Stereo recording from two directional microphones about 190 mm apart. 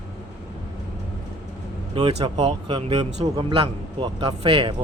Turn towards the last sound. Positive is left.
turn(degrees=-30)  # may be behind; listen again after turning